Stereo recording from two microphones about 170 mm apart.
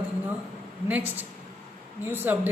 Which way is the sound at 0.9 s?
10° right (ahead or behind).